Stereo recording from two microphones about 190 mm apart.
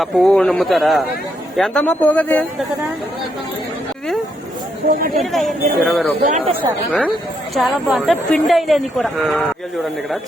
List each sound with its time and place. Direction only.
0.0 s speech: 5° left (ahead or behind)
5.1 s speech: centre (ahead or behind)
6.2 s speech: 40° right (ahead or behind)
7.5 s speech: centre (ahead or behind)